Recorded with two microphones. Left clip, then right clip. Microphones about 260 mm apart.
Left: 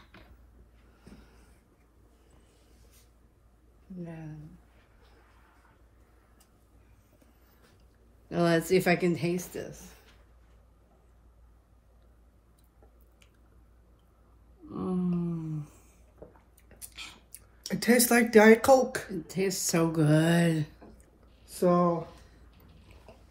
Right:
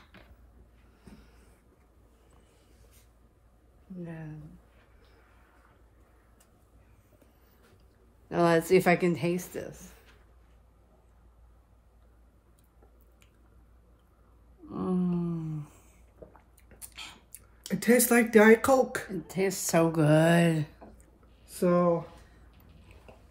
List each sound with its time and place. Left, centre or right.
8.3 s speech: right
14.7 s a sound: centre
15.2 s humming: centre
17.6 s speech: centre
19.2 s speech: right
20.8 s a sound: centre
21.5 s speech: centre